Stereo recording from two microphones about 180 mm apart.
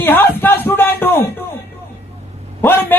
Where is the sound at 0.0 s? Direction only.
10° left (ahead or behind).